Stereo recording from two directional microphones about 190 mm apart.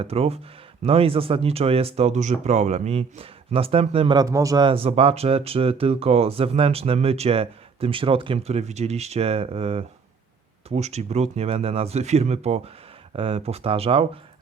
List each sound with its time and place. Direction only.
0.0 s speech: 30° right (ahead or behind)